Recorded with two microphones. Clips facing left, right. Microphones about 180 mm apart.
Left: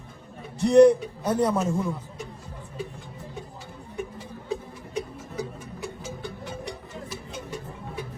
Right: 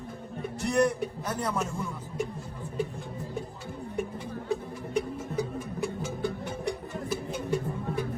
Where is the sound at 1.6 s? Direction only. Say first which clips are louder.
Left 6 dB; 35° left (ahead or behind).